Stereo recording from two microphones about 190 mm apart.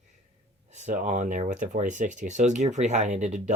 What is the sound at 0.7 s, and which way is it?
Speech, 40° right (ahead or behind).